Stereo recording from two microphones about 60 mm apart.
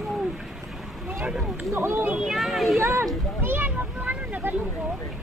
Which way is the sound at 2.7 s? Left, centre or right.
Right.